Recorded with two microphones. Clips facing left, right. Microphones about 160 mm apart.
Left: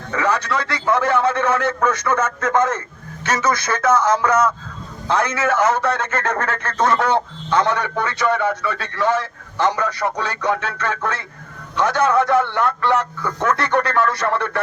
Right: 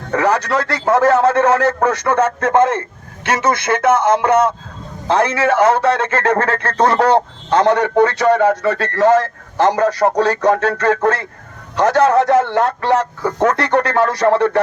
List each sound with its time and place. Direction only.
0.1 s a man's voice: 40° right (ahead or behind)